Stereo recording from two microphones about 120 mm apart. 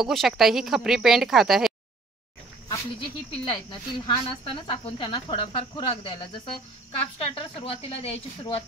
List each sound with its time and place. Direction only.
0.0 s speech: centre (ahead or behind)
3.4 s speech: 40° left (ahead or behind); by 8.6 s 55° left (ahead or behind)